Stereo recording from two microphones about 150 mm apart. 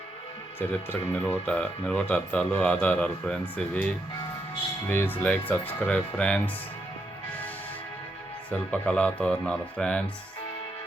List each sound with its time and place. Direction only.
0.6 s speech: 10° left (ahead or behind)
8.4 s speech: 10° left (ahead or behind)